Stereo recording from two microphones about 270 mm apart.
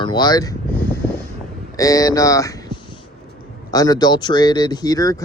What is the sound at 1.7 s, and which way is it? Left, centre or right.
Speech, centre.